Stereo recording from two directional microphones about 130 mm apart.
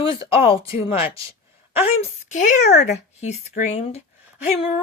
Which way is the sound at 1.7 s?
55° left (ahead or behind).